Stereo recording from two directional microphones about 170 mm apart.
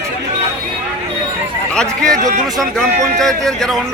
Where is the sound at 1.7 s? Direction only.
5° left (ahead or behind).